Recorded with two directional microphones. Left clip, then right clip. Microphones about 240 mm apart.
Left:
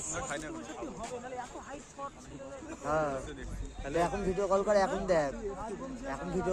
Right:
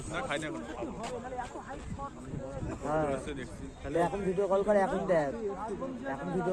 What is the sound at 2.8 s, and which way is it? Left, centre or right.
A man's voice, left.